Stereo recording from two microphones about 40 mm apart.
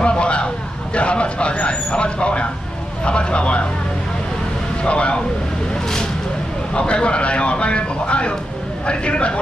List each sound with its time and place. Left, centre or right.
0.0 s vehicle: left
0.9 s a man's voice: left
4.8 s speech: left
6.7 s a sound: left
8.8 s a man's voice: left